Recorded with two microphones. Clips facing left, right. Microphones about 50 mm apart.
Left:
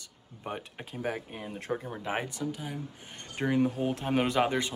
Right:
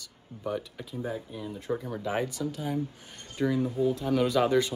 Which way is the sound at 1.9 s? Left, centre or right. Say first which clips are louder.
Right 3 dB; left.